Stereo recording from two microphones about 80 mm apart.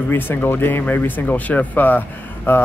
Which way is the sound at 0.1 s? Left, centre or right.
Left.